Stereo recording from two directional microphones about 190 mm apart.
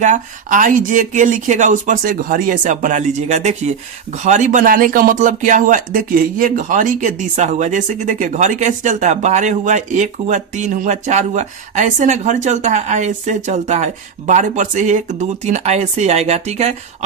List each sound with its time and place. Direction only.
0.0 s speech: 40° right (ahead or behind)